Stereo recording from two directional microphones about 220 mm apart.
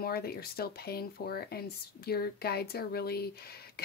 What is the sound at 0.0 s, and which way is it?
Speech, 45° left (ahead or behind).